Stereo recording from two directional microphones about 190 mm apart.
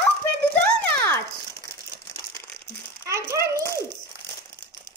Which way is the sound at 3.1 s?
15° right (ahead or behind).